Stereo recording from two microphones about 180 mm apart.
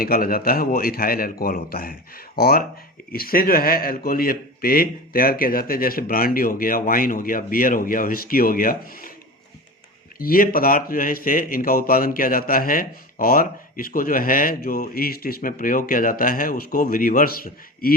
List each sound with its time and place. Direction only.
0.0 s speech: 55° left (ahead or behind)
10.2 s speech: 55° left (ahead or behind)